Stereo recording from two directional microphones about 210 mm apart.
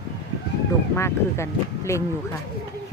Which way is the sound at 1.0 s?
15° left (ahead or behind).